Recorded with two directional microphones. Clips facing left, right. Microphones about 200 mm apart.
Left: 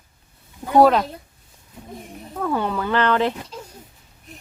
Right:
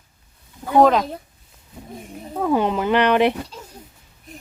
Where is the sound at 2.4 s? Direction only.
15° right (ahead or behind).